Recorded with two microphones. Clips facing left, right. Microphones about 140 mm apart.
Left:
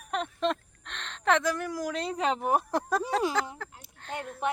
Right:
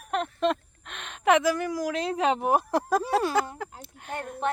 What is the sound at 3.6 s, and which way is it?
Speech, 15° right (ahead or behind).